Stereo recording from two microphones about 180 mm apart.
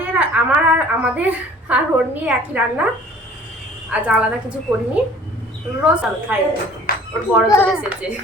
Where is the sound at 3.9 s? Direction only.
5° right (ahead or behind).